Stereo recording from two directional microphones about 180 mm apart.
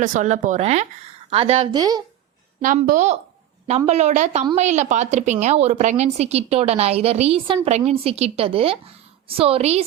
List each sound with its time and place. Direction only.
0.0 s a woman's voice: 45° right (ahead or behind)
1.7 s speech: 20° right (ahead or behind)
2.6 s a woman's voice: 50° right (ahead or behind)